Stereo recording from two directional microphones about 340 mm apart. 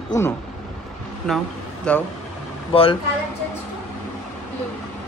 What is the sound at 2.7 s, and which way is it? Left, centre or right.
Speech, centre.